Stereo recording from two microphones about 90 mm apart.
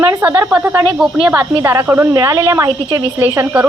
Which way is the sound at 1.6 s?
35° right (ahead or behind).